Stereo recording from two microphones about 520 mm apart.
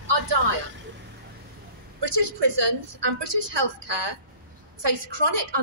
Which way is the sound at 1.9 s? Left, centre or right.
Right.